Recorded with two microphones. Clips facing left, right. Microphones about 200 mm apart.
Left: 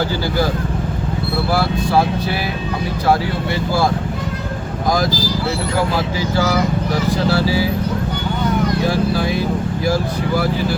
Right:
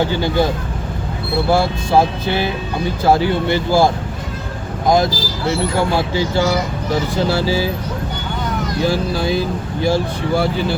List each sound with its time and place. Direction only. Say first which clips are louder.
1.5 s speech: right 2 dB; 25° right (ahead or behind)
5.7 s speech: right 2 dB; 25° right (ahead or behind)
8.8 s speech: even; 30° right (ahead or behind)